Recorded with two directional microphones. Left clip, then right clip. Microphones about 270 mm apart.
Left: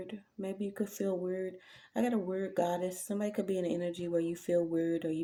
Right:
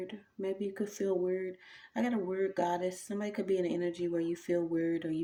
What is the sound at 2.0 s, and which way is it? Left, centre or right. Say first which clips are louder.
Speech: even; left.